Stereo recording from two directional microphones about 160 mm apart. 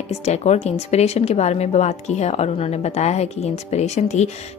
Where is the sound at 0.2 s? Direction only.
45° left (ahead or behind).